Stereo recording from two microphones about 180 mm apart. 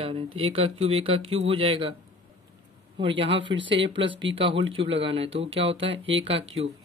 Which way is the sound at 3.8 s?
85° right.